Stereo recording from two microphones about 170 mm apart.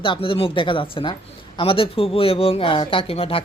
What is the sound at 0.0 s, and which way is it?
Speech, 30° left (ahead or behind).